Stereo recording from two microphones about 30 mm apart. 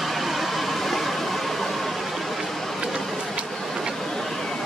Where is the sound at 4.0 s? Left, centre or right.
Centre.